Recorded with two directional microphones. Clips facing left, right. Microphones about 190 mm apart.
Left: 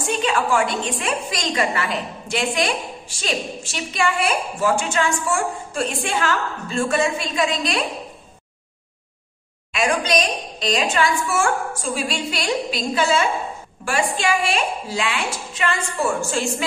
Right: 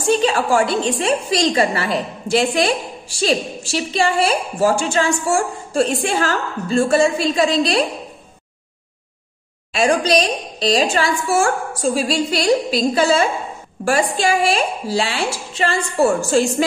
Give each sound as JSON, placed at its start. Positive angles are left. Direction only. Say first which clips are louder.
{"t": 0.0, "sound": "a woman's voice", "louder": "right 5 dB", "side_deg": -35}
{"t": 9.7, "sound": "a woman's voice", "louder": "right 5 dB", "side_deg": -35}